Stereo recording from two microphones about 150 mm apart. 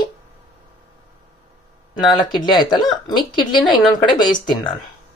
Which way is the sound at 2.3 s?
30° left (ahead or behind).